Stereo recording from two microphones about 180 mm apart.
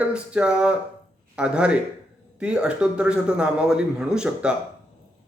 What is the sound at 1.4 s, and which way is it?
A man's voice, 5° right (ahead or behind).